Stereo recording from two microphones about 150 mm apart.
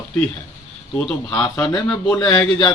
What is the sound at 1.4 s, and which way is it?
Speech, 25° left (ahead or behind).